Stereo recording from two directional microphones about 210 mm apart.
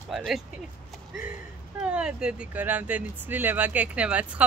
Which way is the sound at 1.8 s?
5° right (ahead or behind).